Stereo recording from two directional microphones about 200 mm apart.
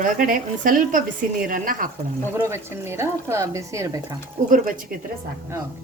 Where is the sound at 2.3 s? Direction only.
10° right (ahead or behind).